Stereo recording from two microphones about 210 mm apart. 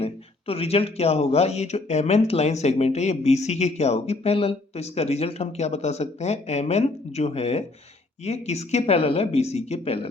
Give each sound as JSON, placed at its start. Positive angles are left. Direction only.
{"t": 0.0, "sound": "speech", "side_deg": 30}